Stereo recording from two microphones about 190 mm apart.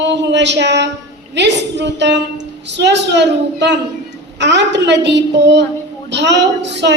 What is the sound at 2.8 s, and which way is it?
A woman's voice, 65° right (ahead or behind).